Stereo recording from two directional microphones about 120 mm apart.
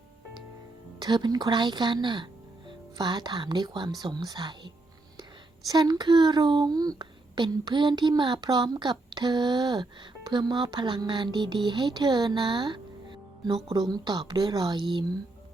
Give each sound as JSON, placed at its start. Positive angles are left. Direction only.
{"t": 0.9, "sound": "speech", "side_deg": -40}